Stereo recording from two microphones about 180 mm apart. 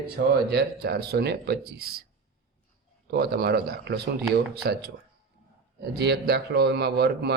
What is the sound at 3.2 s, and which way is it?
Speech, 60° right (ahead or behind).